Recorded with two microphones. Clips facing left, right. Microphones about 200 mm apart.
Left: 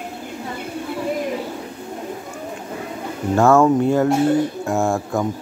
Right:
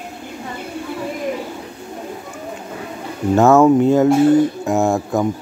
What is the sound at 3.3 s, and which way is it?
Speech, 20° right (ahead or behind).